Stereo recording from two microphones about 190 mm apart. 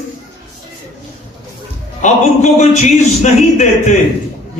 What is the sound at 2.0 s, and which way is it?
A man's voice, 40° left (ahead or behind).